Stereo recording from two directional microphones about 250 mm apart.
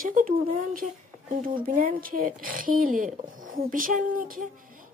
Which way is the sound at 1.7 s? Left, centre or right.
Right.